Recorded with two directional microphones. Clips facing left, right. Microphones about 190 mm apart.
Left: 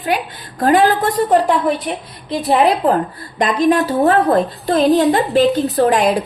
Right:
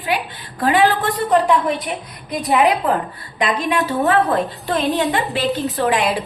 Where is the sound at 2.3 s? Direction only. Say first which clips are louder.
Left 2 dB; 35° left (ahead or behind).